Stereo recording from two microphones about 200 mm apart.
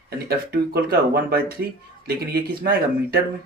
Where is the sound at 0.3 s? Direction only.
50° right (ahead or behind).